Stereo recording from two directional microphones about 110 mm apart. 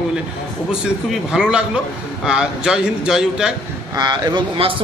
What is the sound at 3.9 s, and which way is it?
Speech, 40° right (ahead or behind).